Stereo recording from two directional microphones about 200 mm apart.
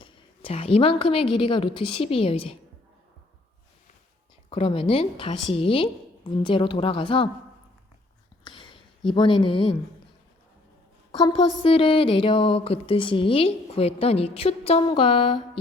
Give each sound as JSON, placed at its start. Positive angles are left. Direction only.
{"t": 0.0, "sound": "a woman's voice", "side_deg": 30}
{"t": 4.4, "sound": "speech", "side_deg": 30}
{"t": 8.4, "sound": "a sound", "side_deg": 25}
{"t": 9.0, "sound": "speech", "side_deg": 25}
{"t": 11.2, "sound": "speech", "side_deg": 20}